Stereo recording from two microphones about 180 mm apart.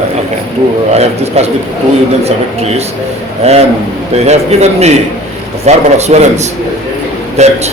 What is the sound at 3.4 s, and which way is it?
A man's voice, 35° right (ahead or behind).